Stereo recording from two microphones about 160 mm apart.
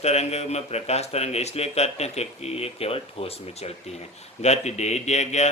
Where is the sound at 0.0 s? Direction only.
40° left (ahead or behind).